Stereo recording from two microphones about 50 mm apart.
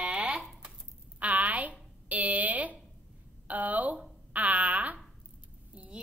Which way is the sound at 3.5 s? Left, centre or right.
Right.